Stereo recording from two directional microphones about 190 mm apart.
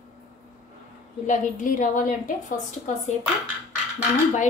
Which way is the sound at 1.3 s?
45° left (ahead or behind).